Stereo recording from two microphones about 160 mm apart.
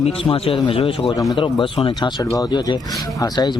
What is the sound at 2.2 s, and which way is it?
Speech, 20° left (ahead or behind).